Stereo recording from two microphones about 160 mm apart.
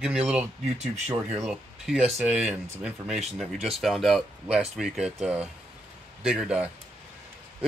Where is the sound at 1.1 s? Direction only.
20° right (ahead or behind).